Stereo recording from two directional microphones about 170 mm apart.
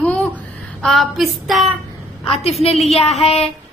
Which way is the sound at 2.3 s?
35° left (ahead or behind).